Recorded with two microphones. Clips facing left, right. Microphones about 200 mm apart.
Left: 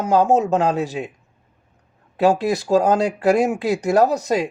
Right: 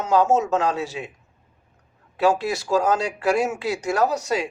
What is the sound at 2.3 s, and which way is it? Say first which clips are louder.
Speech: left 4 dB; 35° left (ahead or behind).